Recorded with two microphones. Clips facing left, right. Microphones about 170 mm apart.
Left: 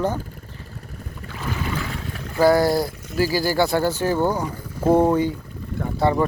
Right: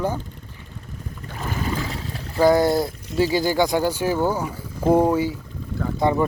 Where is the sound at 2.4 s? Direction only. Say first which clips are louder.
Even; 20° right (ahead or behind).